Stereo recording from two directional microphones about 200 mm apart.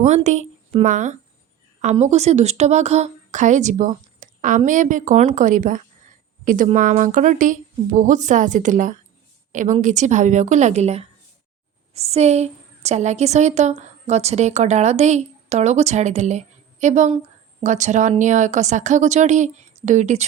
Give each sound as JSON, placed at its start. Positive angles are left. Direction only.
{"t": 0.0, "sound": "a woman's voice", "side_deg": -35}